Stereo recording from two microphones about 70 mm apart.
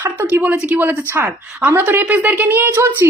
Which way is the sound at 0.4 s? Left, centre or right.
Centre.